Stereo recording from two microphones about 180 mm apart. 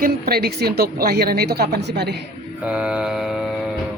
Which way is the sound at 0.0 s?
60° right (ahead or behind).